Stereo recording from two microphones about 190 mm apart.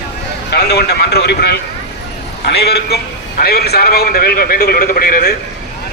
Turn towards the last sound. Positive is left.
turn(degrees=50)  # may be behind; listen again after turning